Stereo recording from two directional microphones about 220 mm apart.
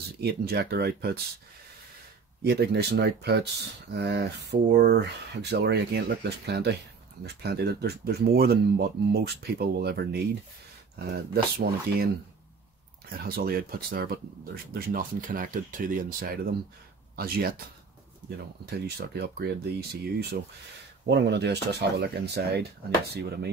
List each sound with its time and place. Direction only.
0.2 s speech: 45° right (ahead or behind)
2.4 s speech: 45° right (ahead or behind)
13.2 s speech: 45° right (ahead or behind)
18.7 s speech: 45° right (ahead or behind)